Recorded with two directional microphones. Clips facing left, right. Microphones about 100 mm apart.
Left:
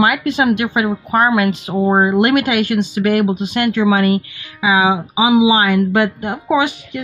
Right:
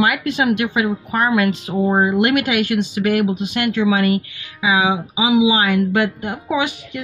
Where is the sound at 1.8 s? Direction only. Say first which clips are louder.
Left 3 dB; 45° left (ahead or behind).